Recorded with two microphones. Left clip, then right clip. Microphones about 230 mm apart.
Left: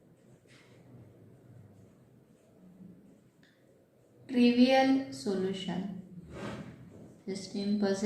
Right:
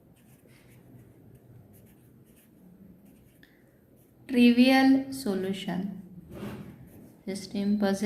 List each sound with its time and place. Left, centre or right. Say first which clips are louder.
4.3 s a woman's voice: right 4 dB; right
7.4 s a woman's voice: right 3 dB; right